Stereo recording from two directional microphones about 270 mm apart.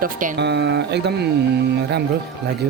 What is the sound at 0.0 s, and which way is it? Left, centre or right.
Speech, right.